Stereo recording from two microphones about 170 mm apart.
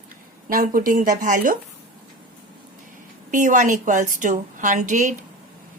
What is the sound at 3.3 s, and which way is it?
A woman's voice, 45° right (ahead or behind).